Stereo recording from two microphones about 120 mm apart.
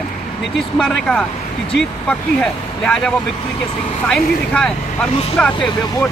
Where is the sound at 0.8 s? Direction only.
5° left (ahead or behind).